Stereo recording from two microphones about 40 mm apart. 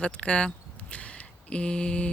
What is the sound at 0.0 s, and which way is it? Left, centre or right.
Speech, left.